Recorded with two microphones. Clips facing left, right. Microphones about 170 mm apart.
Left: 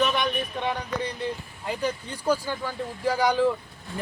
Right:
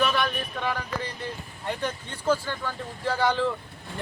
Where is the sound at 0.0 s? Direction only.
20° left (ahead or behind).